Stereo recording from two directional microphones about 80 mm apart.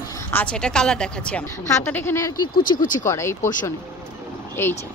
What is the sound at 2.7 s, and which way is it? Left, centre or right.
Speech, left.